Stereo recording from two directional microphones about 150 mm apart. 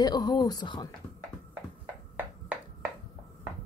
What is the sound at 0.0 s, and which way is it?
Speech, 25° left (ahead or behind).